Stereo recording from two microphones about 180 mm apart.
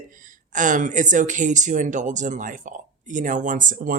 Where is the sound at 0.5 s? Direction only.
45° right (ahead or behind).